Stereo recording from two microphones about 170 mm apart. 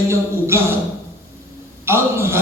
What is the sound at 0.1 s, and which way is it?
Speech, 15° right (ahead or behind).